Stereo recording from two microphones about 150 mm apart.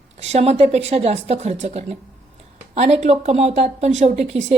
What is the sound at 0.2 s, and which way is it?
Speech, 45° right (ahead or behind).